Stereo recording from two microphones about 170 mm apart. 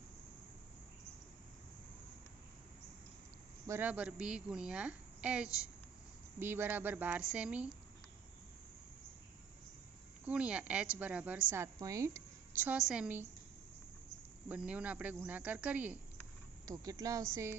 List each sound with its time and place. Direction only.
3.7 s a woman's voice: 10° right (ahead or behind)
10.2 s a woman's voice: 5° right (ahead or behind)
14.4 s speech: 10° right (ahead or behind)
16.6 s a woman's voice: 20° right (ahead or behind)